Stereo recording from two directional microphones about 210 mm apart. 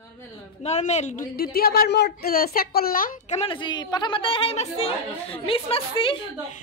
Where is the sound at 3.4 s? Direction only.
25° left (ahead or behind).